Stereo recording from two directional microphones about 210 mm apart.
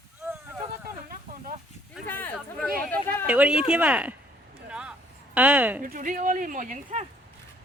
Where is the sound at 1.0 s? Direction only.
40° right (ahead or behind).